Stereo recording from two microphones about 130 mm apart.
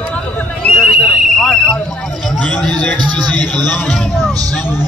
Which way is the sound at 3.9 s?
Centre (ahead or behind).